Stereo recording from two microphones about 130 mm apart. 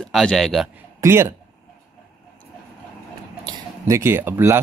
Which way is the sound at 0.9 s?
20° right (ahead or behind).